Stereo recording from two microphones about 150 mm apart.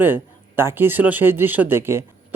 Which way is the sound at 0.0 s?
15° right (ahead or behind).